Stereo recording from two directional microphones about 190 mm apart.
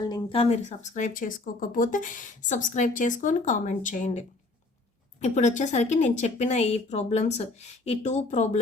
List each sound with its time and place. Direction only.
0.0 s speech: 25° left (ahead or behind)